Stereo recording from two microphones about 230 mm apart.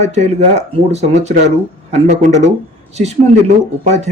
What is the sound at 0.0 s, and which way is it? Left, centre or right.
A man's voice, right.